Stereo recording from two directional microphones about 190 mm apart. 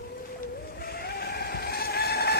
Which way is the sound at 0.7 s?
55° left (ahead or behind).